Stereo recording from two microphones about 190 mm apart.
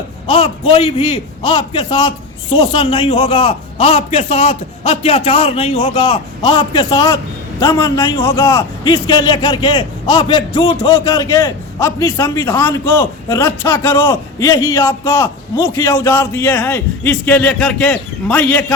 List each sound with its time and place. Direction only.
0.3 s a man's voice: 30° left (ahead or behind); by 18.6 s 5° left (ahead or behind)